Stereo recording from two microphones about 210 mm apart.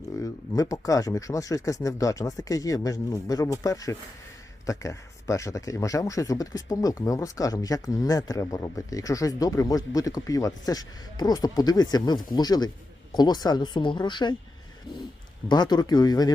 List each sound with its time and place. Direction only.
0.2 s speech: 15° left (ahead or behind)
15.4 s speech: 20° left (ahead or behind)